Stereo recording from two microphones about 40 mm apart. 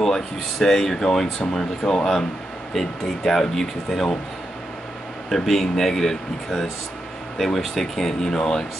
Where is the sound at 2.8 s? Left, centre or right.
Centre.